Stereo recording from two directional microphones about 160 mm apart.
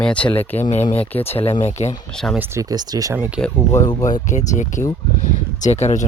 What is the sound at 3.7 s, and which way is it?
Speech, 20° left (ahead or behind).